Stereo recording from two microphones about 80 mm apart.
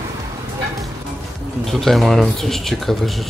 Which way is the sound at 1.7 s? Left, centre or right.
Centre.